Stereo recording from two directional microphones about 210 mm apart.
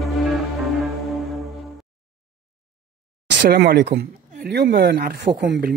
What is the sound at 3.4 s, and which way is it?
Speech, 50° right (ahead or behind).